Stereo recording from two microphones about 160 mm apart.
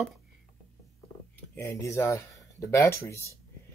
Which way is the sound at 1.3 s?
10° left (ahead or behind).